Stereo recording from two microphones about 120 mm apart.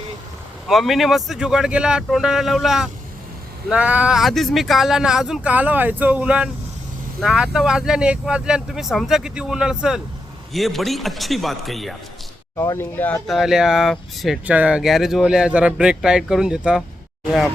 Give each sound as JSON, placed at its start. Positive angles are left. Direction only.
{"t": 0.7, "sound": "speech", "side_deg": 0}
{"t": 12.5, "sound": "speech", "side_deg": 25}
{"t": 13.2, "sound": "speech", "side_deg": 0}
{"t": 14.4, "sound": "speech", "side_deg": -10}